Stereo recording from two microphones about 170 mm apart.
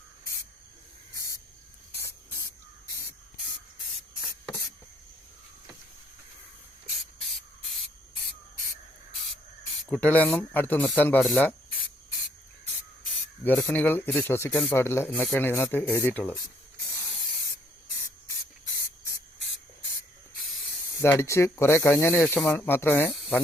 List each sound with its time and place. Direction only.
1.1 s a sound: 20° left (ahead or behind)
9.6 s speech: 5° left (ahead or behind)
13.4 s speech: 10° left (ahead or behind)
21.0 s speech: 15° left (ahead or behind)